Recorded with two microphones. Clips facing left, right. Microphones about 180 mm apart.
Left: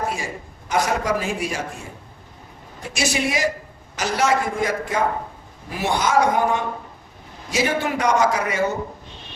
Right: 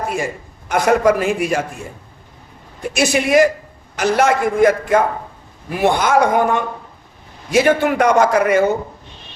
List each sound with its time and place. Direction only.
0.7 s a man's voice: 60° right (ahead or behind)
2.9 s a man's voice: 55° right (ahead or behind)